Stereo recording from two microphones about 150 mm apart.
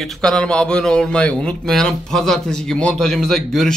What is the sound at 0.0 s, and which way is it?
Speech, 5° left (ahead or behind).